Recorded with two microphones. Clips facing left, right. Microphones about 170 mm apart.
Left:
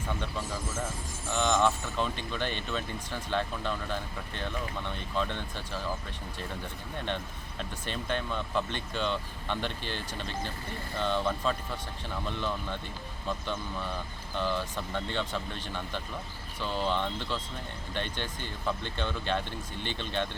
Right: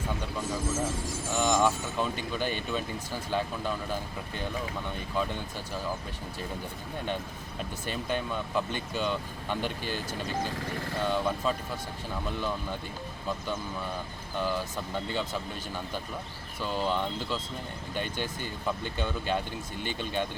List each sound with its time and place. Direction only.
1.3 s speech: 10° right (ahead or behind)
7.6 s speech: 10° right (ahead or behind)
14.3 s speech: 10° right (ahead or behind)